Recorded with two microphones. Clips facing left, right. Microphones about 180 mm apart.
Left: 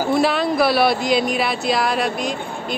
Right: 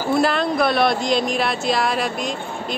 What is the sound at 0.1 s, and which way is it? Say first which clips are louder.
A woman's voice: right 1 dB; centre (ahead or behind).